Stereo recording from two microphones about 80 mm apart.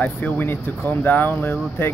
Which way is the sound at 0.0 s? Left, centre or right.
Left.